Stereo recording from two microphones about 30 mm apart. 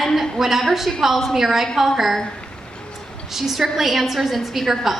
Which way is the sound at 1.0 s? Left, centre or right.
Centre.